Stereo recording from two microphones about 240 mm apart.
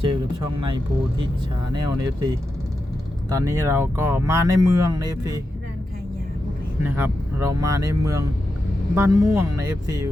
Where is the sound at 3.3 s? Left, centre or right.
Centre.